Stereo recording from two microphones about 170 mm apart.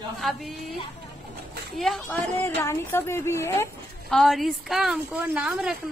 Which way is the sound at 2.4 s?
15° left (ahead or behind).